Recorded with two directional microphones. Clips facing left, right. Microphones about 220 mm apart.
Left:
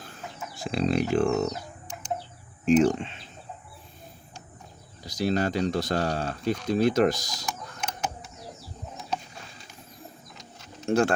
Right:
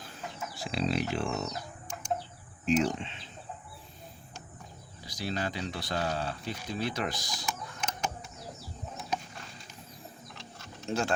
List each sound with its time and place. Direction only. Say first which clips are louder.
0.6 s speech: left 6 dB; 50° left (ahead or behind)
2.6 s speech: left 7 dB; 50° left (ahead or behind)
5.0 s speech: left 9 dB; 45° left (ahead or behind)
10.8 s speech: left 9 dB; 55° left (ahead or behind)